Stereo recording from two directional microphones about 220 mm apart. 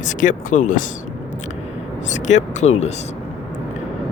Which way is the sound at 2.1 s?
35° left (ahead or behind).